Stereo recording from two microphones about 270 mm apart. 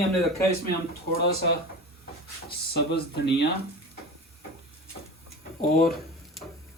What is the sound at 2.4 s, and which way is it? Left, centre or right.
Speech, left.